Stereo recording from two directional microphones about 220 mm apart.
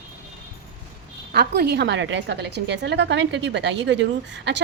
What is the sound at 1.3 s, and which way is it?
A woman's voice, 45° right (ahead or behind).